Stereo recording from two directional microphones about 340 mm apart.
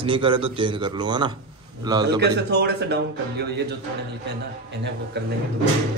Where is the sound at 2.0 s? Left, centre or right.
Right.